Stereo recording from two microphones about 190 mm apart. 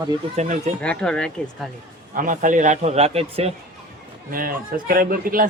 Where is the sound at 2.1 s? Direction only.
45° right (ahead or behind).